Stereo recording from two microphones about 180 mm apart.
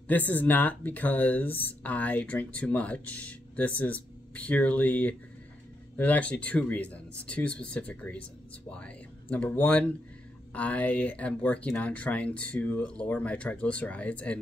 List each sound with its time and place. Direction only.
0.3 s speech: 10° left (ahead or behind)